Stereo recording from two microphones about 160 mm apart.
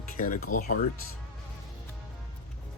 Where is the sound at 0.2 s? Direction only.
60° left (ahead or behind).